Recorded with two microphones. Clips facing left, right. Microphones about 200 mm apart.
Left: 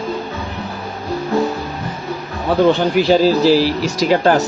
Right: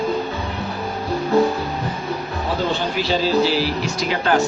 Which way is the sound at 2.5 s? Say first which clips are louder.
Left 10 dB; 60° left (ahead or behind).